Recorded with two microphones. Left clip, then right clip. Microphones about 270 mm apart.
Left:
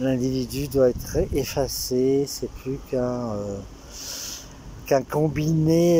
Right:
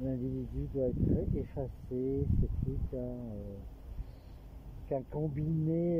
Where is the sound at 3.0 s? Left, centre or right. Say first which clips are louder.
Left 18 dB; left.